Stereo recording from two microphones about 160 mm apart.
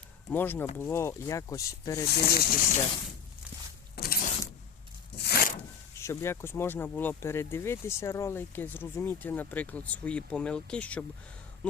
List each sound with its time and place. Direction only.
0.3 s speech: 10° left (ahead or behind)
2.0 s speech: 75° left (ahead or behind)
3.9 s vehicle: 75° left (ahead or behind)
5.1 s tearing: 85° left
6.0 s speech: 15° left (ahead or behind)